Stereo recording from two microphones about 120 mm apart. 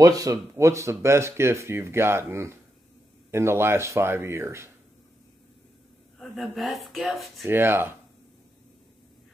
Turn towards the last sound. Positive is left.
turn(degrees=-20)  # may be behind; listen again after turning